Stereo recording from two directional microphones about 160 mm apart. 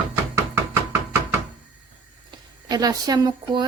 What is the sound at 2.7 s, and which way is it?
Speech, 25° right (ahead or behind).